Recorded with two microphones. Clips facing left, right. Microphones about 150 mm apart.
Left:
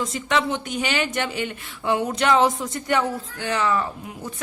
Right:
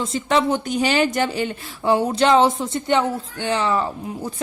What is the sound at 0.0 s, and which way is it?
A woman's voice, 30° right (ahead or behind).